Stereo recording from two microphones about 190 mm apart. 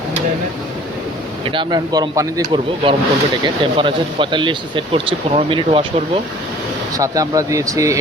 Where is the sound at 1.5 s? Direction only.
25° right (ahead or behind).